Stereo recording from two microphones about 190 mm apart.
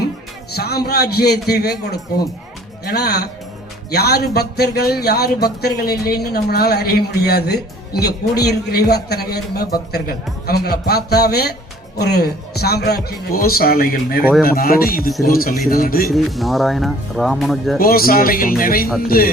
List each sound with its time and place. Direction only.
0.5 s speech: 55° left (ahead or behind)
16.0 s speech: centre (ahead or behind)
17.7 s speech: 50° left (ahead or behind)